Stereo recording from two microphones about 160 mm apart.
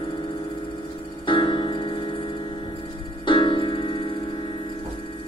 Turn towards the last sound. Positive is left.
turn(degrees=30)  # may be behind; listen again after turning